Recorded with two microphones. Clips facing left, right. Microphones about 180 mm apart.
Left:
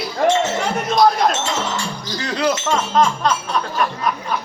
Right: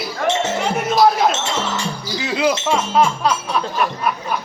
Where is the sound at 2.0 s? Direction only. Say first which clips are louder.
Right 1 dB; 5° right (ahead or behind).